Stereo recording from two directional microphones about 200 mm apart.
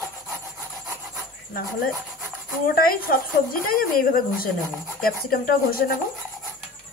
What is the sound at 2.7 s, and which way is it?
A woman's voice, 45° left (ahead or behind).